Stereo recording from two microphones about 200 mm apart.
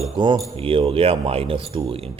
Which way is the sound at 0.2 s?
20° right (ahead or behind).